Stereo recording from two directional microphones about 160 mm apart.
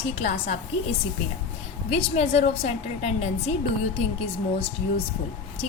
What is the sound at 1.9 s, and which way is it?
A woman's voice, 40° left (ahead or behind).